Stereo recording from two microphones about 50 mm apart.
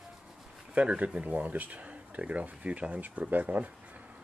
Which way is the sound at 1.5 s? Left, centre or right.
Right.